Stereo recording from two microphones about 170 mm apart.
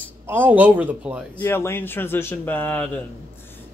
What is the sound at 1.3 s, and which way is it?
Speech, 10° left (ahead or behind).